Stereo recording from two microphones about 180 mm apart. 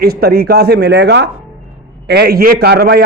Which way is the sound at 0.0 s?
60° right (ahead or behind).